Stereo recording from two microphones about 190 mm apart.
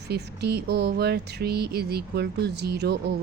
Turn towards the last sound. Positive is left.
turn(degrees=-60)  # may be behind; listen again after turning